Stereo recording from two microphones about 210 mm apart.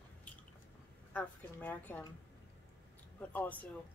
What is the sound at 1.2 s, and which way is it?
Speech, 10° left (ahead or behind).